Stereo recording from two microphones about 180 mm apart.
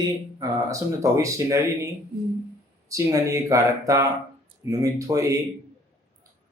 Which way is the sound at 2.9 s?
15° right (ahead or behind).